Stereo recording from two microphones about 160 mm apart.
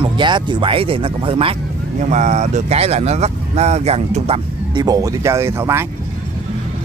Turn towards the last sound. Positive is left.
turn(degrees=-15)  # may be behind; listen again after turning